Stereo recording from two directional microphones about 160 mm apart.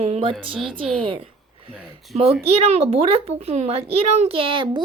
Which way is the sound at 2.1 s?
40° right (ahead or behind).